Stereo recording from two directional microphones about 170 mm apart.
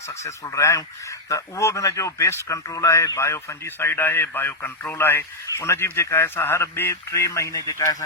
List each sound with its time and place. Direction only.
0.3 s speech: 15° left (ahead or behind)